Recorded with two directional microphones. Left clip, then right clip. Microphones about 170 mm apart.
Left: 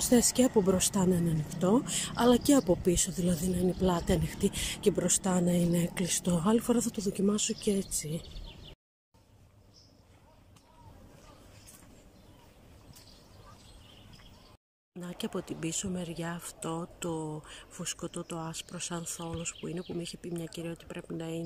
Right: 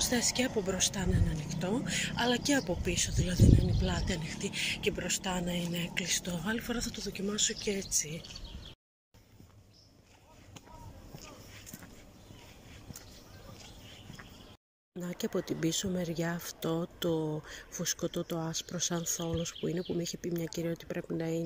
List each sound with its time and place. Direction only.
0.1 s speech: 40° left (ahead or behind)
15.0 s speech: 5° left (ahead or behind)